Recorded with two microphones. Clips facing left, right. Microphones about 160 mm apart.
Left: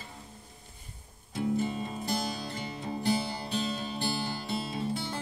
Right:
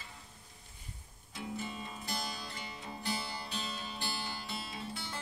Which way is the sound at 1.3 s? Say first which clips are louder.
Left 11 dB; 40° left (ahead or behind).